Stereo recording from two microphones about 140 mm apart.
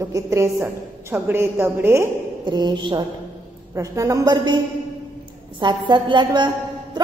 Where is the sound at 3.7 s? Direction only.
25° right (ahead or behind).